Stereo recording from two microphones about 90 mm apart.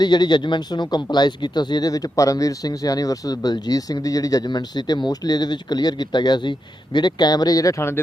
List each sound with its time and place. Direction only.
0.0 s speech: 55° left (ahead or behind); by 7.9 s 35° left (ahead or behind)